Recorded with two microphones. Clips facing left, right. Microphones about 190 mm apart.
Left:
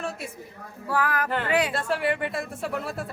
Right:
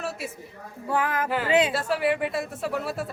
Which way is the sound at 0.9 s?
20° right (ahead or behind).